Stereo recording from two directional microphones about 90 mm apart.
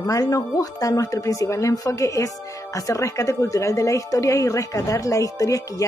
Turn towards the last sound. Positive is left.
turn(degrees=40)  # may be behind; listen again after turning